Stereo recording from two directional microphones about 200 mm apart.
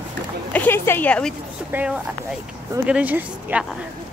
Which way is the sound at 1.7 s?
10° right (ahead or behind).